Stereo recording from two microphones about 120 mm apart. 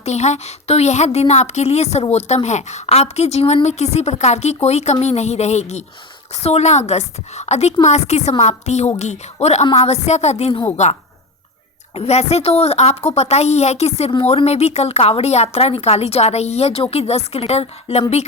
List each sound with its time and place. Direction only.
0.0 s a woman's voice: 70° left (ahead or behind)
10.8 s speech: 80° left
11.9 s speech: 60° left (ahead or behind)
14.1 s speech: 50° left (ahead or behind)